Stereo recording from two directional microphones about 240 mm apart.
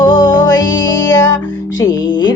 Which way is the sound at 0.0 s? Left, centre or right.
Centre.